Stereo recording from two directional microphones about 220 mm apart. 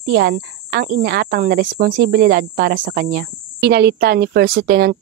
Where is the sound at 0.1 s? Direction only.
50° right (ahead or behind).